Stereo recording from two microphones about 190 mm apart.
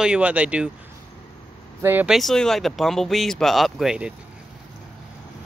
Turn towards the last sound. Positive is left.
turn(degrees=-5)  # may be behind; listen again after turning